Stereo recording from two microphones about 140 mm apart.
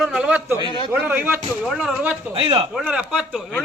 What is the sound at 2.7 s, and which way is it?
Speech, 5° right (ahead or behind).